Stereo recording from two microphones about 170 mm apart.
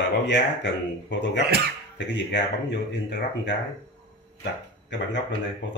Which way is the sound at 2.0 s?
90° left.